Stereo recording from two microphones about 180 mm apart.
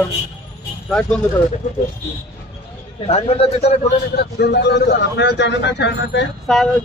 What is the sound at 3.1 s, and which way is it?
Speech, 35° left (ahead or behind).